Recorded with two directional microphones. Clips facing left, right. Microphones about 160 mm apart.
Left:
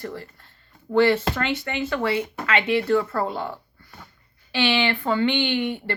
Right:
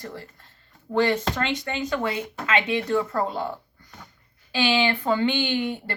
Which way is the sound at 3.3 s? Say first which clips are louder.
Even; 15° right (ahead or behind).